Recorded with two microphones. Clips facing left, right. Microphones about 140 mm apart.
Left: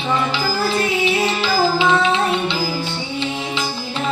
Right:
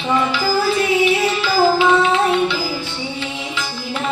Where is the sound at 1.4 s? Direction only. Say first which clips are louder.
Right 3 dB; 25° left (ahead or behind).